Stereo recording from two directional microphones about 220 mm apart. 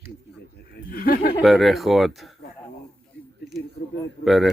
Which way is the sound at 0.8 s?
45° left (ahead or behind).